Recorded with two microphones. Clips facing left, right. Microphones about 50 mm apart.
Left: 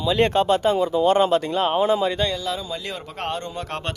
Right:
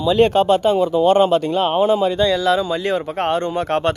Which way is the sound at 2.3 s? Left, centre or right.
Right.